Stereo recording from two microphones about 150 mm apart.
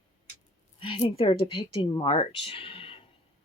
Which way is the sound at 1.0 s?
35° left (ahead or behind).